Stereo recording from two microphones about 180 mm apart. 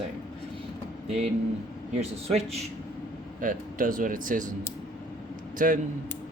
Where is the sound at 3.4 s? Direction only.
50° right (ahead or behind).